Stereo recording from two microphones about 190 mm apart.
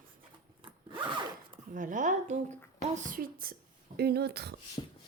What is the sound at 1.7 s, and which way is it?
A woman's voice, 45° right (ahead or behind).